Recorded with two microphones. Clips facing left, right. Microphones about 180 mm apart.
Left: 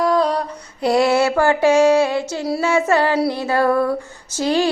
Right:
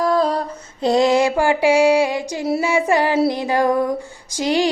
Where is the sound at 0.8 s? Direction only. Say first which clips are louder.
Even; 20° right (ahead or behind).